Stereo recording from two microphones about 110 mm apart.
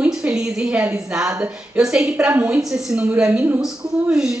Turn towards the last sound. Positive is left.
turn(degrees=-5)  # may be behind; listen again after turning